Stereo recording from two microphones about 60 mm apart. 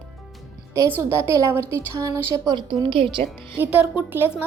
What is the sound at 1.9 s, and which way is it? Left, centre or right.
Speech, right.